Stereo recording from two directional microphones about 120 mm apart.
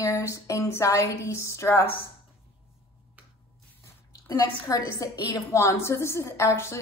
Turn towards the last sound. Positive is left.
turn(degrees=25)  # may be behind; listen again after turning